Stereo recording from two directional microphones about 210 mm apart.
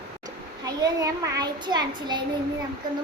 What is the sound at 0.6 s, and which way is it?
A child's voice, 15° right (ahead or behind).